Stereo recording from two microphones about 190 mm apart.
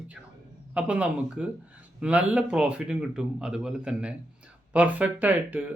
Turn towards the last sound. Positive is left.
turn(degrees=-10)  # may be behind; listen again after turning